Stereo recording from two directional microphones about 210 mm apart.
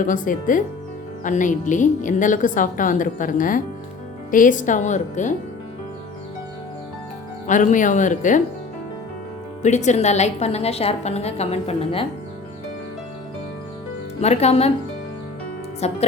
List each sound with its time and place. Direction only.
0.0 s a woman's voice: 40° left (ahead or behind)
7.4 s a woman's voice: 35° left (ahead or behind)
9.6 s a woman's voice: 35° left (ahead or behind)
14.2 s a woman's voice: 30° left (ahead or behind)
15.8 s a woman's voice: 30° left (ahead or behind)